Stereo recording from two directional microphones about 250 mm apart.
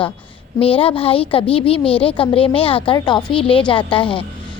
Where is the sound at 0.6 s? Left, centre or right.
Left.